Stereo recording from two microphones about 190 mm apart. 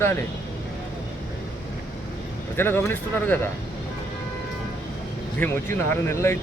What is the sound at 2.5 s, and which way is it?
Speech, 10° left (ahead or behind).